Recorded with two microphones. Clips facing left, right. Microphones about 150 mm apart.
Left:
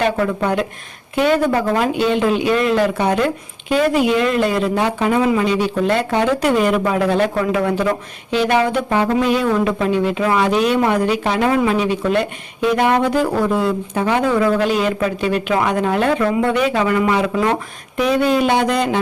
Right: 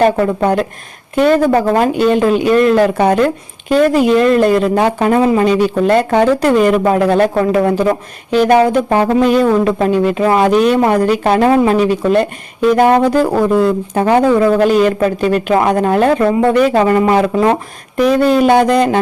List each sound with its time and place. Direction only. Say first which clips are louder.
0.0 s speech: right 6 dB; 45° right (ahead or behind)